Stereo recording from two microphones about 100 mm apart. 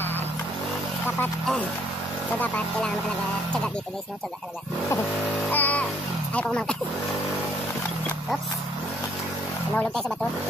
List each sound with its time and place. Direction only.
5.5 s music: 15° left (ahead or behind)
6.3 s speech: 10° left (ahead or behind)